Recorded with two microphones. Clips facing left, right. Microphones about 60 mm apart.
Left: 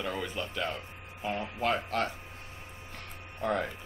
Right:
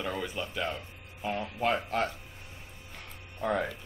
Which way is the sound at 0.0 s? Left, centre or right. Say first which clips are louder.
Even; centre.